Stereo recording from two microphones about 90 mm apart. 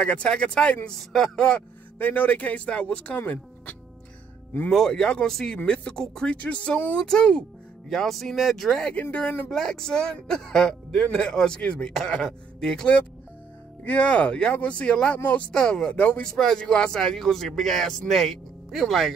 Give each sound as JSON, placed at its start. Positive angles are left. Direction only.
{"t": 0.0, "sound": "speech", "side_deg": 15}
{"t": 4.6, "sound": "speech", "side_deg": 5}
{"t": 9.0, "sound": "speech", "side_deg": 20}
{"t": 9.5, "sound": "speech", "side_deg": 5}
{"t": 15.5, "sound": "speech", "side_deg": 5}